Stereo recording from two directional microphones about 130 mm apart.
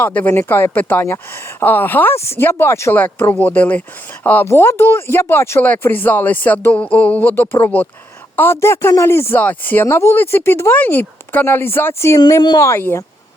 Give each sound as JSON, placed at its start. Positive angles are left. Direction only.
{"t": 0.0, "sound": "speech", "side_deg": 10}
{"t": 12.2, "sound": "speech", "side_deg": 35}
{"t": 12.6, "sound": "speech", "side_deg": 20}